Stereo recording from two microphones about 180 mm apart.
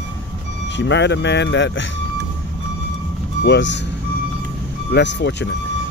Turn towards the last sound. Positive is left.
turn(degrees=75)  # may be behind; listen again after turning